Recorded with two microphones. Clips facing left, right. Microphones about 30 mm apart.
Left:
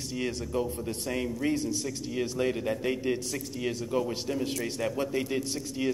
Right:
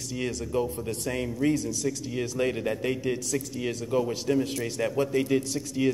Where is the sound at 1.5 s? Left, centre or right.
Left.